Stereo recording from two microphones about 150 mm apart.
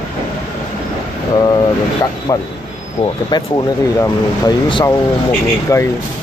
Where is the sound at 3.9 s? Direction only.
25° left (ahead or behind).